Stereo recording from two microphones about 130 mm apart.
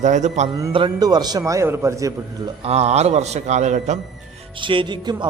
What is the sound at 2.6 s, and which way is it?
A man's voice, 55° right (ahead or behind).